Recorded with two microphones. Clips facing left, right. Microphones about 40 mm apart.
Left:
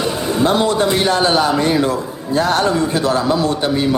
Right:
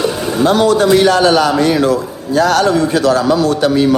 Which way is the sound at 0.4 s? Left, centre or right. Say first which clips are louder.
Right 5 dB; left.